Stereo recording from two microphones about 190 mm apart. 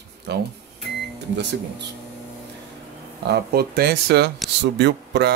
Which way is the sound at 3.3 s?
55° right (ahead or behind).